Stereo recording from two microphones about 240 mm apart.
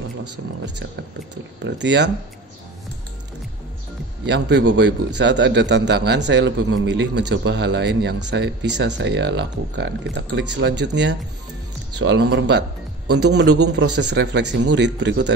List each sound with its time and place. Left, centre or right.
1.6 s a man's voice: right
4.3 s a man's voice: right